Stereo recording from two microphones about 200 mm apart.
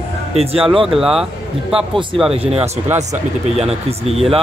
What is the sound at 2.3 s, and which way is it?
Speech, 30° right (ahead or behind).